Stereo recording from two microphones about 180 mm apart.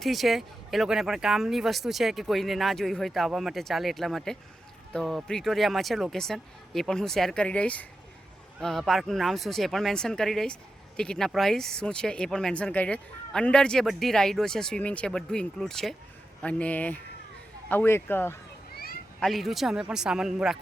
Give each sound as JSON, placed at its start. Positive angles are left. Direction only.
{"t": 0.0, "sound": "speech", "side_deg": 0}
{"t": 18.7, "sound": "a sound", "side_deg": 55}
{"t": 19.2, "sound": "speech", "side_deg": 0}